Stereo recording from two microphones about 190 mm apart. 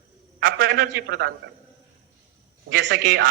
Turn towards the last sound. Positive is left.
turn(degrees=-50)  # may be behind; listen again after turning